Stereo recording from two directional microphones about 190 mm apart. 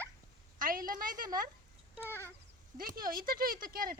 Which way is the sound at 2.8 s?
50° right (ahead or behind).